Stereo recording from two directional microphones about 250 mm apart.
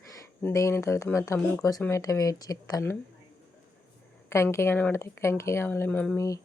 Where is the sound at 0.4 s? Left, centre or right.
Centre.